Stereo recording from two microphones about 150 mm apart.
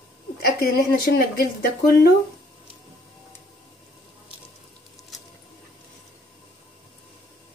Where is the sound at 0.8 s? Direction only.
85° left.